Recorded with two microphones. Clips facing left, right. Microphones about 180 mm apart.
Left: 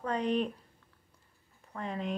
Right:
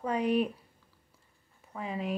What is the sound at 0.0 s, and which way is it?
Speech, 10° right (ahead or behind).